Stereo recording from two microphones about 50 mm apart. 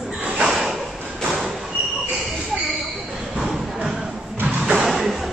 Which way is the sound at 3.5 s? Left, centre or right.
Centre.